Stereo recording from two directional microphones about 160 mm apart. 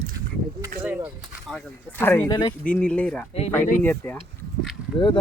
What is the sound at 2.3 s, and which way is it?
Speech, 25° left (ahead or behind).